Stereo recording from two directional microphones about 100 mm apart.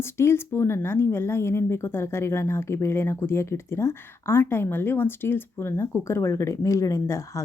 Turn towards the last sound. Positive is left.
turn(degrees=30)  # may be behind; listen again after turning